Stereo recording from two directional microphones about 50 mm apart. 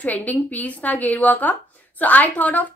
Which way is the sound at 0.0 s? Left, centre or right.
Left.